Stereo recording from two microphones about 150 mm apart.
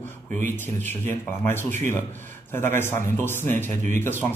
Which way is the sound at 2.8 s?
15° left (ahead or behind).